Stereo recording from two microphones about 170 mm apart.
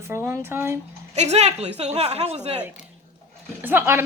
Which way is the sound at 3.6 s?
10° right (ahead or behind).